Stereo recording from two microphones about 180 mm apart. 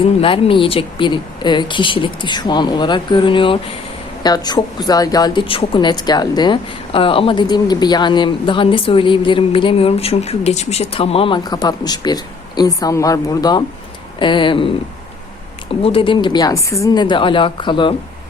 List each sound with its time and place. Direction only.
0.0 s speech: 30° left (ahead or behind)
15.7 s speech: 30° left (ahead or behind)